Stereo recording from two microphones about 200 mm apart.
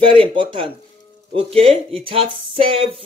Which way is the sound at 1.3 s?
30° right (ahead or behind).